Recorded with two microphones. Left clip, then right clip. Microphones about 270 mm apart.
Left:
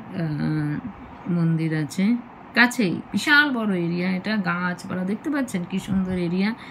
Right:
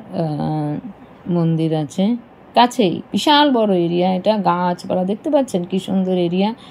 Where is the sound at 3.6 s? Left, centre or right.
Right.